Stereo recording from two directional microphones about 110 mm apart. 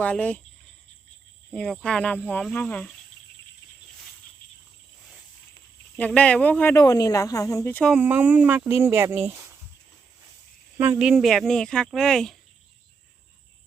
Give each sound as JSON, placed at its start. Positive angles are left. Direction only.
{"t": 0.0, "sound": "speech", "side_deg": 10}
{"t": 1.5, "sound": "speech", "side_deg": 5}
{"t": 6.0, "sound": "speech", "side_deg": 10}
{"t": 6.7, "sound": "speech", "side_deg": 30}
{"t": 7.9, "sound": "speech", "side_deg": -15}
{"t": 10.9, "sound": "speech", "side_deg": -5}